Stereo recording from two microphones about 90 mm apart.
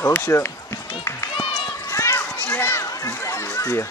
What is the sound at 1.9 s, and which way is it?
Children playing, 30° left (ahead or behind).